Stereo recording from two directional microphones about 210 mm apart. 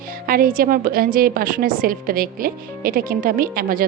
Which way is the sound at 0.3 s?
40° right (ahead or behind).